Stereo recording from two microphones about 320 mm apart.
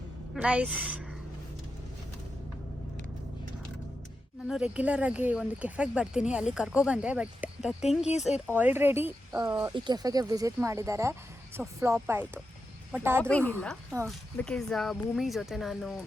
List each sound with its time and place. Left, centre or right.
0.3 s speech: centre
4.4 s speech: centre
7.8 s speech: left
8.5 s speech: centre